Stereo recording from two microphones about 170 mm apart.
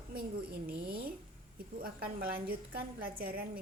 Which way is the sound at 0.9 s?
65° right (ahead or behind).